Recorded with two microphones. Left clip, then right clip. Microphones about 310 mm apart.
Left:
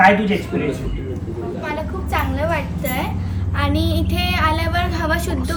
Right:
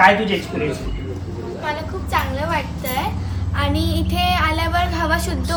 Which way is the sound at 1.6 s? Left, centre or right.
Centre.